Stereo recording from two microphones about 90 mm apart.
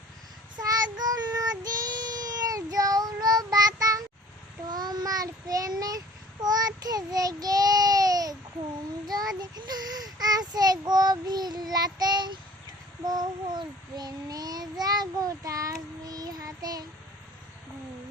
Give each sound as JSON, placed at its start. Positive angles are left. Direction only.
{"t": 0.6, "sound": "child singing", "side_deg": -45}